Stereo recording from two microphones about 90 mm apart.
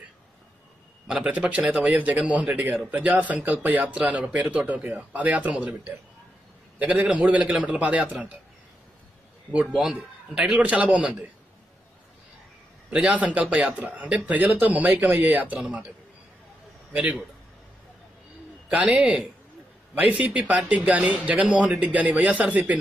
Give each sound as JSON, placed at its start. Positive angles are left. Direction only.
{"t": 1.0, "sound": "speech", "side_deg": -10}
{"t": 3.9, "sound": "speech", "side_deg": -10}
{"t": 6.8, "sound": "speech", "side_deg": -15}
{"t": 9.7, "sound": "a man's voice", "side_deg": 0}
{"t": 9.9, "sound": "speech", "side_deg": -15}
{"t": 12.9, "sound": "speech", "side_deg": -15}
{"t": 16.9, "sound": "speech", "side_deg": -15}
{"t": 18.7, "sound": "speech", "side_deg": -10}